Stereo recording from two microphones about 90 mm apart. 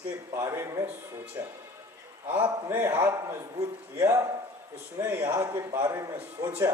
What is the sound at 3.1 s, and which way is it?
A man's voice, 35° right (ahead or behind).